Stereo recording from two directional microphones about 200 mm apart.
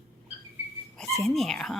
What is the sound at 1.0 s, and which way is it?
Speech, centre (ahead or behind).